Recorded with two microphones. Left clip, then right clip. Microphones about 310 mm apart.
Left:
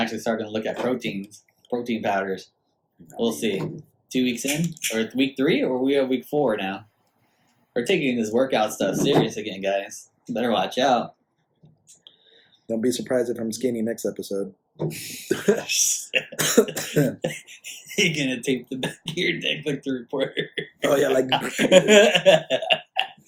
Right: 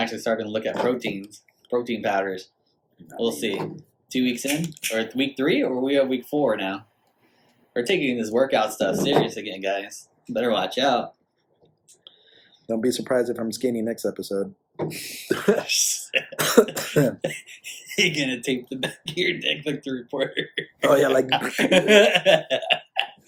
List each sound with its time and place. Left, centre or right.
0.0 s speech: centre
12.6 s speech: centre
14.8 s speech: centre
15.3 s speech: centre
15.6 s speech: centre
16.3 s cough: centre
16.7 s speech: centre
17.2 s speech: centre
20.9 s speech: centre
21.7 s speech: centre